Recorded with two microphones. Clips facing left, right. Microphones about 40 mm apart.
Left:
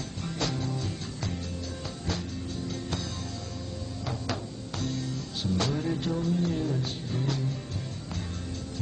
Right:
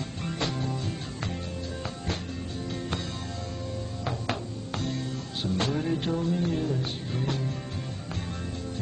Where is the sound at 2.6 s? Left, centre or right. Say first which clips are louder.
Right 3 dB; right.